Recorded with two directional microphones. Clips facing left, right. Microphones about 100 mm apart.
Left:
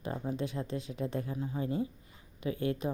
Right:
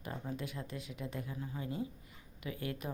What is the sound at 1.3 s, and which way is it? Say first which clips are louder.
Speech: left 7 dB; 25° left (ahead or behind).